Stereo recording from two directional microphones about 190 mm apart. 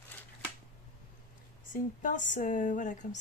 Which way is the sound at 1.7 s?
40° left (ahead or behind).